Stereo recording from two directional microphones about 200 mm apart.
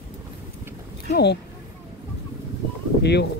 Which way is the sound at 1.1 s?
55° left (ahead or behind).